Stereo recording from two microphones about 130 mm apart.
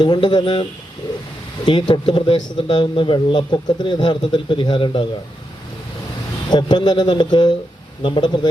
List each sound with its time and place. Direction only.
0.0 s a man's voice: 35° left (ahead or behind)
6.5 s a man's voice: 35° left (ahead or behind)